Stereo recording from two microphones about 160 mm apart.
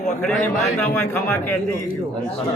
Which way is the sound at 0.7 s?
10° left (ahead or behind).